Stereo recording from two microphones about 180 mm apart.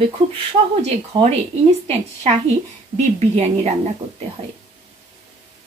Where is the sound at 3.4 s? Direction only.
40° right (ahead or behind).